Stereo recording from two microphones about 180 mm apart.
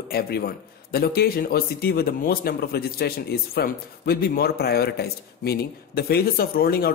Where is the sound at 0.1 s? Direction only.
60° left (ahead or behind).